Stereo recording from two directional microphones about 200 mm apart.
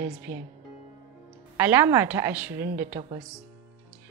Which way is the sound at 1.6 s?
10° right (ahead or behind).